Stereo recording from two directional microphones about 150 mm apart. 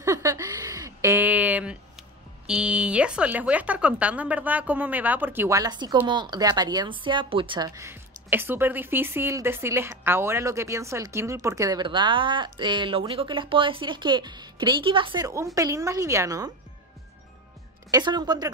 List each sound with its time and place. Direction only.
0.0 s speech: 20° right (ahead or behind)
17.9 s speech: 30° right (ahead or behind)